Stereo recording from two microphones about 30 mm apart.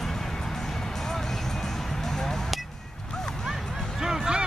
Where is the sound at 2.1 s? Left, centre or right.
Centre.